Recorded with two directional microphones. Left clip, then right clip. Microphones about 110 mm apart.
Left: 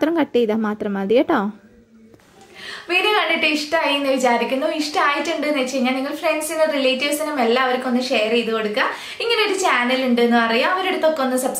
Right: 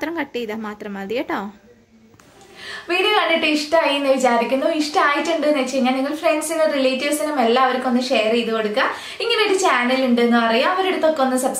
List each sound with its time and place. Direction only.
0.0 s speech: 35° left (ahead or behind)
2.9 s a woman's voice: centre (ahead or behind)